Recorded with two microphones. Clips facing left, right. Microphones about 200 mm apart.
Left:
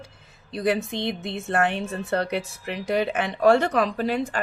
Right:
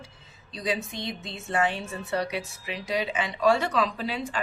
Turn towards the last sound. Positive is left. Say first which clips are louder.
# left 6 dB
turn(degrees=50)  # may be behind; listen again after turning